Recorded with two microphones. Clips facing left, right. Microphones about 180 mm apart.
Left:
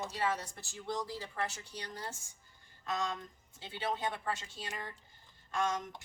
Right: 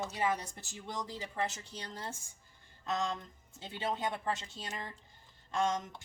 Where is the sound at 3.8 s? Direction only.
25° right (ahead or behind).